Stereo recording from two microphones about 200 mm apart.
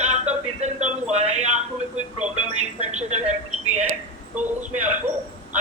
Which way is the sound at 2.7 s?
35° right (ahead or behind).